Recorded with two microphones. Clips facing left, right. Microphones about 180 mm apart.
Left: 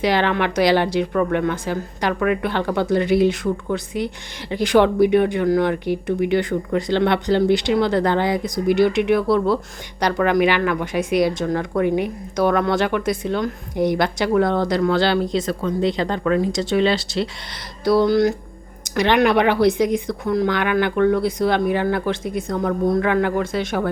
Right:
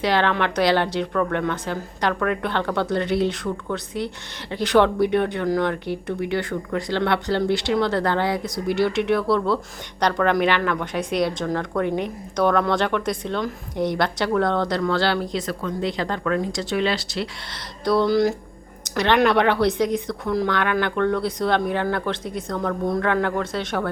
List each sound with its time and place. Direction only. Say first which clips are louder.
0.0 s speech: left 2 dB; 15° left (ahead or behind)
17.5 s speech: left 3 dB; 10° left (ahead or behind)
18.9 s speech: left 2 dB; 10° left (ahead or behind)